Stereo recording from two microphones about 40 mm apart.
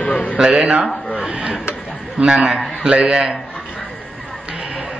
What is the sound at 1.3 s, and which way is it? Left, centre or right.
Speech, right.